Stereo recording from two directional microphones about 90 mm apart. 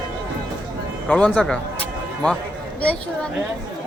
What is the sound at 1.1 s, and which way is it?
Speech, 15° left (ahead or behind).